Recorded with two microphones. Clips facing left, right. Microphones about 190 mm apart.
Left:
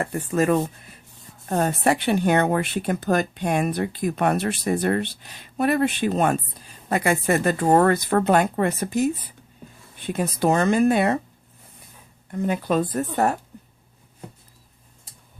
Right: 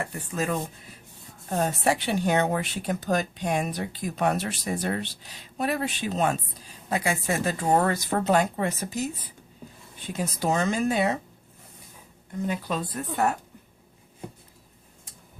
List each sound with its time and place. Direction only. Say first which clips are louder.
0.0 s speech: left 8 dB; 55° left (ahead or behind)
10.1 s speech: left 6 dB; 60° left (ahead or behind)
12.3 s speech: left 6 dB; 55° left (ahead or behind)